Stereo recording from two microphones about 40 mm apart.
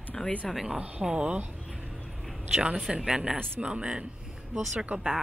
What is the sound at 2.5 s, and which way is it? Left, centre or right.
Speech, right.